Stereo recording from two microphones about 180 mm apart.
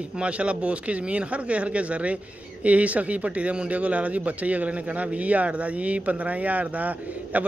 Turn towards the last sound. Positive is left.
turn(degrees=-10)  # may be behind; listen again after turning